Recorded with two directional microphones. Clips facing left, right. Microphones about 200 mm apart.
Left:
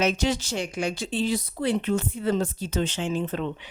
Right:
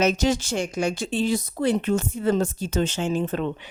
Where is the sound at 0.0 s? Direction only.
45° right (ahead or behind).